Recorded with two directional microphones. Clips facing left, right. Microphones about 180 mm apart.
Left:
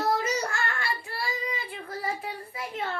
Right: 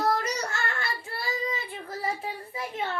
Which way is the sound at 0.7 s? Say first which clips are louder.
Left 1 dB; 20° right (ahead or behind).